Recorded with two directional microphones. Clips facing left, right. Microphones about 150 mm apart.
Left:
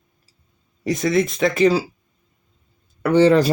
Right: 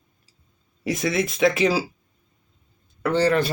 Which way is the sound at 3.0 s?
15° left (ahead or behind).